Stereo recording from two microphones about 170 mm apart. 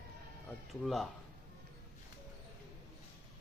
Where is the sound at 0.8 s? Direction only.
Centre (ahead or behind).